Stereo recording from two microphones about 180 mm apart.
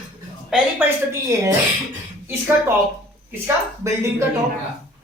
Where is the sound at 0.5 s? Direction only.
10° right (ahead or behind).